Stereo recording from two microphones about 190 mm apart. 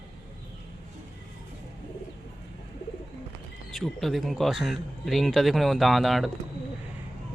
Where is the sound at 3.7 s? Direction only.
Centre (ahead or behind).